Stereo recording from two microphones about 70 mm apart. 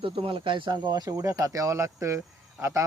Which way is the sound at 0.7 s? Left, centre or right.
Right.